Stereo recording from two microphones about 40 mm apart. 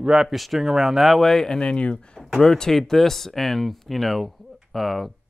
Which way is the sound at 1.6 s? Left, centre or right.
Left.